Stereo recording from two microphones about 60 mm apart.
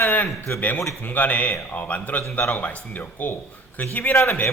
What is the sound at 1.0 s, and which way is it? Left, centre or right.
Speech, left.